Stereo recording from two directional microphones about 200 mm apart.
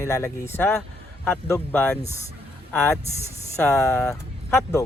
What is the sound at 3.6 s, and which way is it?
Speech, 10° left (ahead or behind).